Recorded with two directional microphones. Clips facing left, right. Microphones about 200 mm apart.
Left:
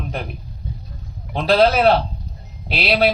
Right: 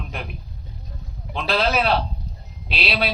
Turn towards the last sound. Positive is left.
turn(degrees=45)  # may be behind; listen again after turning